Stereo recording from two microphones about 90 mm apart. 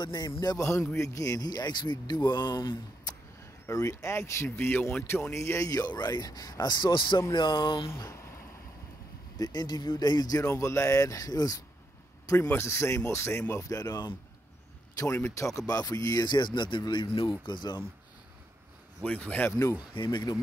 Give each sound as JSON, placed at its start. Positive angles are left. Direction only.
{"t": 0.0, "sound": "a man's voice", "side_deg": 50}
{"t": 0.4, "sound": "a man's voice", "side_deg": 40}
{"t": 3.6, "sound": "a man's voice", "side_deg": 35}
{"t": 7.3, "sound": "a sound", "side_deg": 55}
{"t": 8.0, "sound": "a sound", "side_deg": 30}
{"t": 9.4, "sound": "a man's voice", "side_deg": 45}
{"t": 10.5, "sound": "speech", "side_deg": 30}
{"t": 12.4, "sound": "speech", "side_deg": 25}
{"t": 15.2, "sound": "a man's voice", "side_deg": 35}
{"t": 17.5, "sound": "a man's voice", "side_deg": 55}
{"t": 19.0, "sound": "speech", "side_deg": 15}
{"t": 20.0, "sound": "a sound", "side_deg": 55}